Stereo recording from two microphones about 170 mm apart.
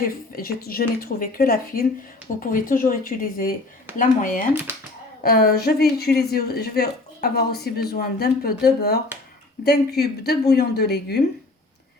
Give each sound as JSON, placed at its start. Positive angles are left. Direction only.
{"t": 0.3, "sound": "speech", "side_deg": 60}
{"t": 5.2, "sound": "speech", "side_deg": 65}